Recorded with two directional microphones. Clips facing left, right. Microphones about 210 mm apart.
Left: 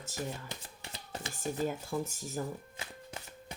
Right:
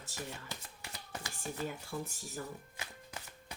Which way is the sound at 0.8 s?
25° left (ahead or behind).